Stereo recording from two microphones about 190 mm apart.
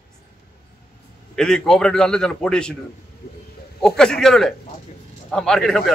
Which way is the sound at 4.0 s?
5° left (ahead or behind).